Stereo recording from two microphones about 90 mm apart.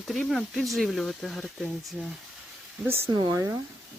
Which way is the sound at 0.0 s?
Centre (ahead or behind).